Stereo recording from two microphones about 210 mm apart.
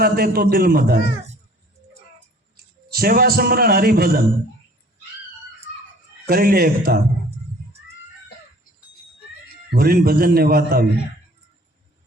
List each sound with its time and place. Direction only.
0.0 s a man's voice: 45° right (ahead or behind)
2.9 s a man's voice: 45° right (ahead or behind)
6.2 s a man's voice: 45° right (ahead or behind)
9.7 s a man's voice: 45° right (ahead or behind)